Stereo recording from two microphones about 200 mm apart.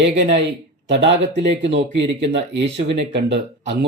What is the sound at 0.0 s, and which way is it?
Speech, 60° right (ahead or behind).